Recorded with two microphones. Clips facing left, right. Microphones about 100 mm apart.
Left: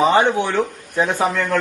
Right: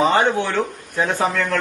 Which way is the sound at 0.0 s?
15° left (ahead or behind).